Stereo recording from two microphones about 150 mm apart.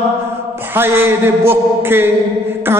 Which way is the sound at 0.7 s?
15° right (ahead or behind).